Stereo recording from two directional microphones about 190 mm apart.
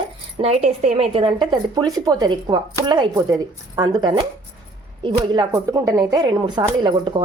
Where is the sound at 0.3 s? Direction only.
35° right (ahead or behind).